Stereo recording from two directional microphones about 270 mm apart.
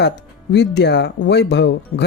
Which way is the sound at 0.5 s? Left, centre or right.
Left.